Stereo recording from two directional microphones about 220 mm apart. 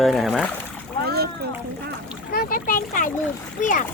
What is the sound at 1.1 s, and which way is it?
Splash, 45° right (ahead or behind).